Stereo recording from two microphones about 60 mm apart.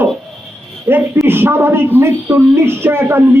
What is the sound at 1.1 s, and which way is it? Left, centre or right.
A man's voice, right.